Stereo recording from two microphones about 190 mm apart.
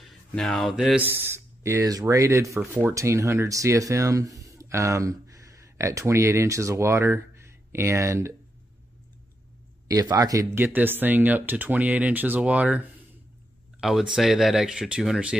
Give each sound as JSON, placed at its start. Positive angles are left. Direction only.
{"t": 0.0, "sound": "speech", "side_deg": 0}
{"t": 9.8, "sound": "speech", "side_deg": -20}